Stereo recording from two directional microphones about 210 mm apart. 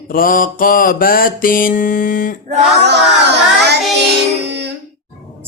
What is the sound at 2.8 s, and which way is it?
Music, 55° right (ahead or behind).